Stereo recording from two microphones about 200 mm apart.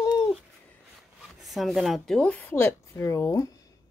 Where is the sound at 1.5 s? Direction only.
Centre (ahead or behind); by 3.5 s 15° left (ahead or behind).